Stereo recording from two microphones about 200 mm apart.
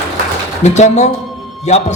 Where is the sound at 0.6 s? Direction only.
35° left (ahead or behind).